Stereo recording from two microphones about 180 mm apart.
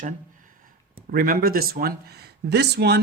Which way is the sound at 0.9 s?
55° right (ahead or behind).